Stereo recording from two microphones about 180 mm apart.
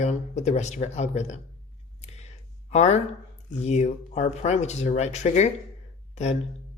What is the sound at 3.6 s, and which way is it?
A woman's voice, 40° left (ahead or behind).